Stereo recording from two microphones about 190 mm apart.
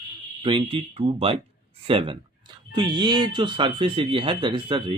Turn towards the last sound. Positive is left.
turn(degrees=-25)  # may be behind; listen again after turning